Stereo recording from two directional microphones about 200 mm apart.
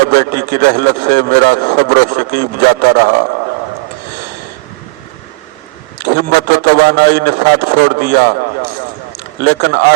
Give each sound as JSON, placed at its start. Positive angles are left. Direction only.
{"t": 0.1, "sound": "a man's voice", "side_deg": -50}
{"t": 6.0, "sound": "a man's voice", "side_deg": -50}